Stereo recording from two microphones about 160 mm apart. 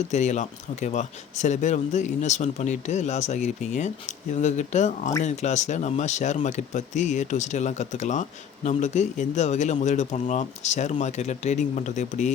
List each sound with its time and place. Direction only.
0.1 s speech: 45° left (ahead or behind)